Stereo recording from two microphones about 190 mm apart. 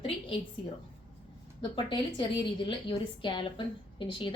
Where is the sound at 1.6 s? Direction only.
25° left (ahead or behind).